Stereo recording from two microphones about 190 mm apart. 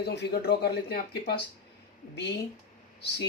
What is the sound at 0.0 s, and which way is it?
Speech, 60° left (ahead or behind).